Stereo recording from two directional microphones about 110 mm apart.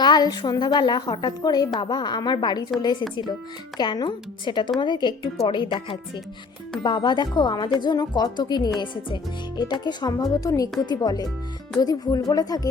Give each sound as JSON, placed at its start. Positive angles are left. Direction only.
{"t": 0.0, "sound": "a woman's voice", "side_deg": 40}
{"t": 3.8, "sound": "a woman's voice", "side_deg": 45}